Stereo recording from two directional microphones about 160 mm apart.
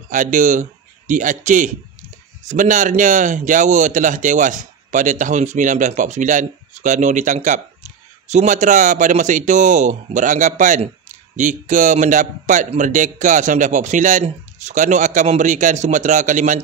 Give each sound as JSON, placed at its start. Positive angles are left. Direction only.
{"t": 0.1, "sound": "a man's voice", "side_deg": -55}